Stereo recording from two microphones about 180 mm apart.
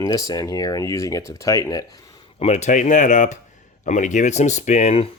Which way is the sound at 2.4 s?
35° left (ahead or behind).